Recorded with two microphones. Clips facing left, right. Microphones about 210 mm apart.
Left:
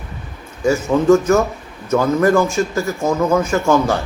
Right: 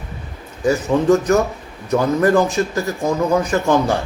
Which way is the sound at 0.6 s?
15° right (ahead or behind).